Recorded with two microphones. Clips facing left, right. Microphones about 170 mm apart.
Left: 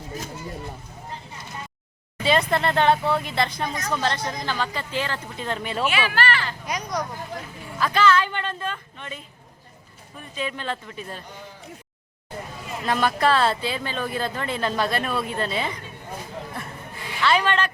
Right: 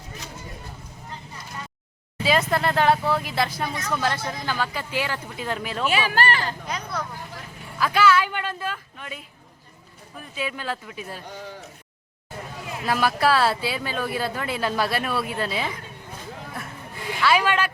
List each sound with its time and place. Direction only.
2.2 s speech: 5° right (ahead or behind)
5.9 s speech: 40° right (ahead or behind)
6.7 s speech: 15° left (ahead or behind)
7.8 s speech: 10° right (ahead or behind)
12.8 s speech: 5° right (ahead or behind)
17.2 s speech: 5° right (ahead or behind)